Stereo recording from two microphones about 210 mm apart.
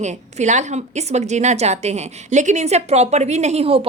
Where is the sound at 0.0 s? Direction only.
35° right (ahead or behind).